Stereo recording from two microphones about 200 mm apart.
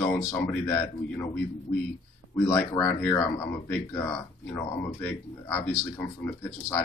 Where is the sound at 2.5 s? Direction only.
10° left (ahead or behind).